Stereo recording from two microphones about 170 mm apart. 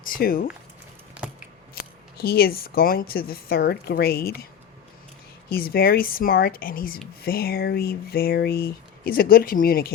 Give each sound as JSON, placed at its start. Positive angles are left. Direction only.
{"t": 0.0, "sound": "speech", "side_deg": 55}
{"t": 1.7, "sound": "speech", "side_deg": 65}
{"t": 5.5, "sound": "speech", "side_deg": 60}